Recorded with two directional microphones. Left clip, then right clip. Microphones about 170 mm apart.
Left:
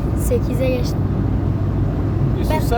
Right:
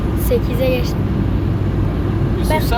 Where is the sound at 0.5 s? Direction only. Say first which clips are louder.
Right 3 dB; 10° left (ahead or behind).